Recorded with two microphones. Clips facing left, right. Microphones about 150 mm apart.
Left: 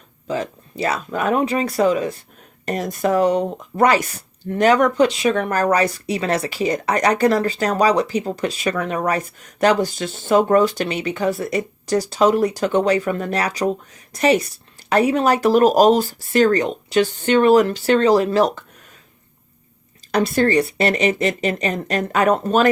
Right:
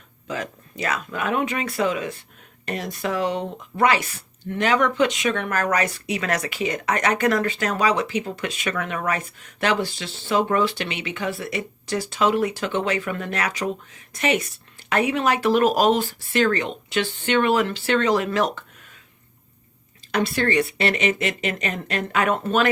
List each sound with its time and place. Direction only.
0.3 s speech: 30° left (ahead or behind)
20.1 s speech: 40° left (ahead or behind)